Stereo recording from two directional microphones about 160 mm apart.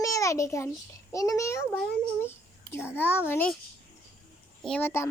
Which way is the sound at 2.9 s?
10° left (ahead or behind).